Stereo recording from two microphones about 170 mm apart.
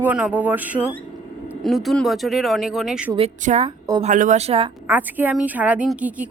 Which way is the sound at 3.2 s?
40° right (ahead or behind).